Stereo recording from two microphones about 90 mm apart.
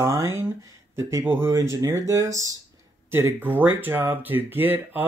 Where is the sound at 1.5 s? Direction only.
35° right (ahead or behind).